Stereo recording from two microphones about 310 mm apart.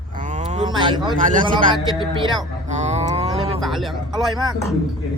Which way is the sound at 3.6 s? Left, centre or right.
Centre.